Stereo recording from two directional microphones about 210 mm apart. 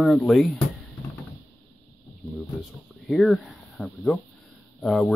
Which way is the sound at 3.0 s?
Centre (ahead or behind).